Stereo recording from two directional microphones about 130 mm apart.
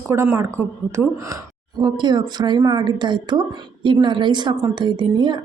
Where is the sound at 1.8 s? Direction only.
35° right (ahead or behind).